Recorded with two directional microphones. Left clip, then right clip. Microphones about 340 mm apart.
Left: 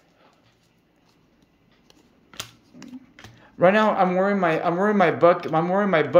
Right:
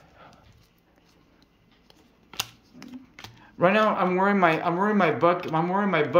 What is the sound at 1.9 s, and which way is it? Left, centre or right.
Computer keyboard, centre.